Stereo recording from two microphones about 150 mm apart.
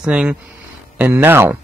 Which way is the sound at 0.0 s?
5° right (ahead or behind).